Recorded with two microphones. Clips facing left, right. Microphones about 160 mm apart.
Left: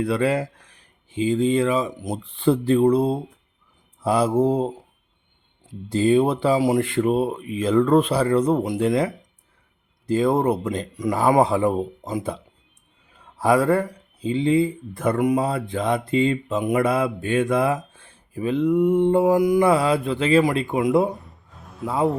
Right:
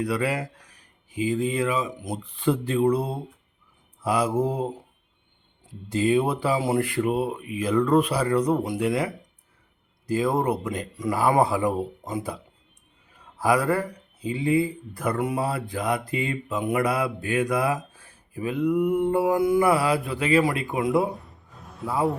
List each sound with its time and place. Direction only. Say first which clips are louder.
0.0 s speech: left 5 dB; 25° left (ahead or behind)
5.9 s speech: left 4 dB; 30° left (ahead or behind)
13.4 s speech: left 4 dB; 25° left (ahead or behind)
21.1 s a sound: left 3 dB; centre (ahead or behind)
21.8 s speech: left 3 dB; 25° left (ahead or behind)